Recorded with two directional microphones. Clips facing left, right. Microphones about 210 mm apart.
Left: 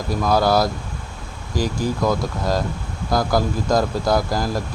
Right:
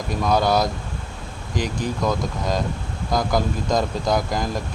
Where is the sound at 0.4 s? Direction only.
20° right (ahead or behind).